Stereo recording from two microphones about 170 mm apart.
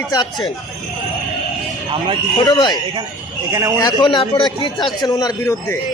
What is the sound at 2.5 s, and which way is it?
Speech, 25° left (ahead or behind).